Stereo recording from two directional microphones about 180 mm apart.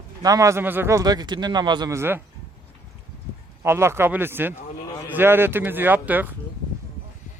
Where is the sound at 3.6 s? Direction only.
15° right (ahead or behind).